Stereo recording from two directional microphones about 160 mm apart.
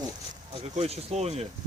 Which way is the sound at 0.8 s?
40° right (ahead or behind).